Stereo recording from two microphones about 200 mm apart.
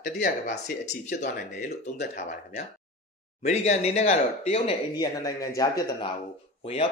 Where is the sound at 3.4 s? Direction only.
35° left (ahead or behind).